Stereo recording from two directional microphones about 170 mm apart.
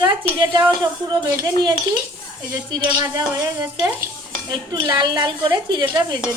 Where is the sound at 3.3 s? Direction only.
20° right (ahead or behind).